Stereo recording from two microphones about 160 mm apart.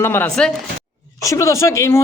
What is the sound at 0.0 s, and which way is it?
Speech, 10° left (ahead or behind).